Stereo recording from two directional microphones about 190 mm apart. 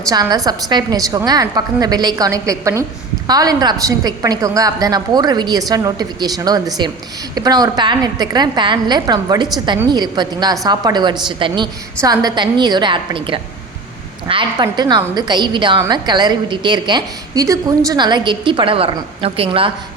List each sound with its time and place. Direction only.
0.1 s a woman's voice: 20° right (ahead or behind)